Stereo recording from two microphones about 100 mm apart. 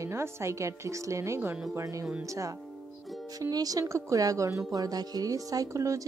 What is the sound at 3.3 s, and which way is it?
Speech, 40° right (ahead or behind).